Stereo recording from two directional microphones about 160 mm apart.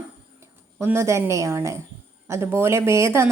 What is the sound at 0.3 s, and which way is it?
A woman's voice, 15° right (ahead or behind).